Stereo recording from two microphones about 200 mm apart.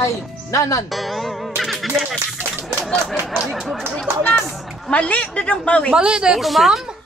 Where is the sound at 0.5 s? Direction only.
15° left (ahead or behind).